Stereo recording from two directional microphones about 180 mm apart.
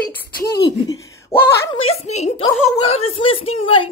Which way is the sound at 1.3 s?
30° left (ahead or behind).